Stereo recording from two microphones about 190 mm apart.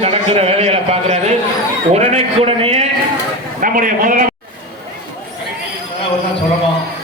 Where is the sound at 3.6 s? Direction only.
45° right (ahead or behind).